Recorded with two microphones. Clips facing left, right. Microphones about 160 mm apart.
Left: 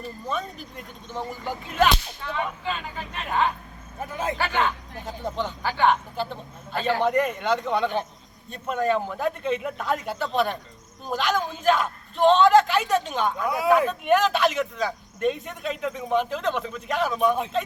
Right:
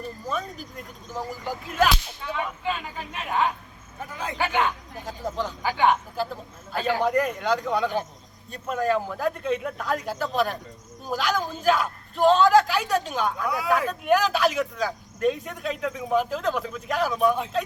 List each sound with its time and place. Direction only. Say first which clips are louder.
0.3 s speech: left 1 dB; 5° right (ahead or behind)
5.0 s speech: even; centre (ahead or behind)
13.5 s speech: left 6 dB; 20° left (ahead or behind)
13.8 s speech: left 1 dB; centre (ahead or behind)